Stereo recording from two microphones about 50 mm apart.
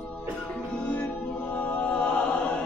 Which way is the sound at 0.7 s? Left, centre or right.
Left.